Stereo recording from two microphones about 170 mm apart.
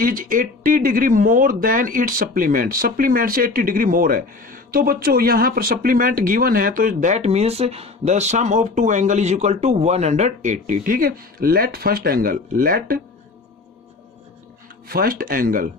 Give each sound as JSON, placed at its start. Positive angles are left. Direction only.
{"t": 0.0, "sound": "speech", "side_deg": -55}
{"t": 14.9, "sound": "speech", "side_deg": -60}